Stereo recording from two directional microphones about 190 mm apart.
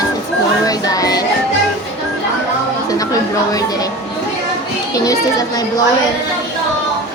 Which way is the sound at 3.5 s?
20° left (ahead or behind).